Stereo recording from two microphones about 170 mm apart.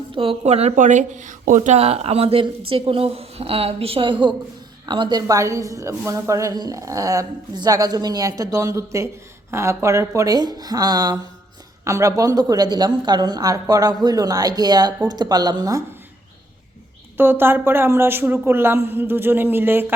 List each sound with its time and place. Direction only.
0.1 s a woman's voice: 30° right (ahead or behind)
17.2 s a woman's voice: 15° right (ahead or behind)